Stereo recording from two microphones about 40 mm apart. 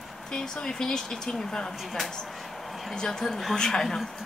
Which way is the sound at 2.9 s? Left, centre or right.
Centre.